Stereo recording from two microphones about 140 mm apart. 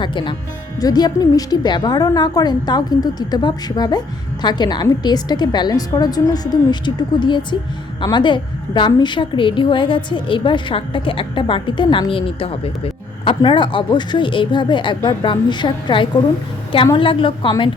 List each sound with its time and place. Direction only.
0.0 s a woman's voice: 35° left (ahead or behind)